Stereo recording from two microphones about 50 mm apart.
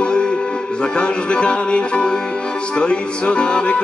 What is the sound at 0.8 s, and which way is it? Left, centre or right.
Music, centre.